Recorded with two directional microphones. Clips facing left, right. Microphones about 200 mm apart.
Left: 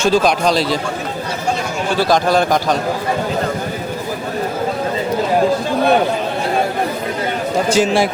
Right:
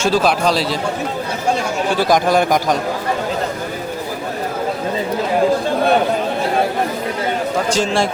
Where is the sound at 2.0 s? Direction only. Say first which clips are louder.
Left 1 dB; 15° right (ahead or behind).